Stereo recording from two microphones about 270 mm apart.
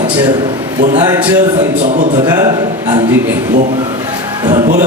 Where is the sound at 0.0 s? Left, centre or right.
Centre.